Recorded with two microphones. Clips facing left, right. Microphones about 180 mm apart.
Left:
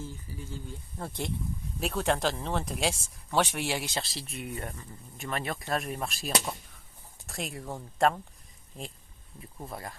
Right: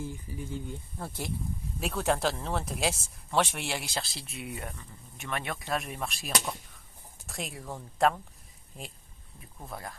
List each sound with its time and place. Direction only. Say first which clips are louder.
0.0 s speech: right 3 dB; 15° right (ahead or behind)
0.9 s speech: left 3 dB; 5° right (ahead or behind)